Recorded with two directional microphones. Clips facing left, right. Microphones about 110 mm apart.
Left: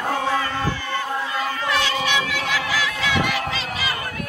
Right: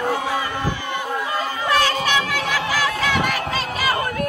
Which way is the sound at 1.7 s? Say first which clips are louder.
Right 4 dB; 45° right (ahead or behind).